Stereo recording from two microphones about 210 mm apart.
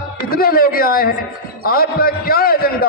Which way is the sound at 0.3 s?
45° left (ahead or behind).